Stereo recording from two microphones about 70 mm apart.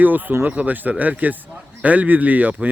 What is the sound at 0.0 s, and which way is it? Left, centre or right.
Speech, right.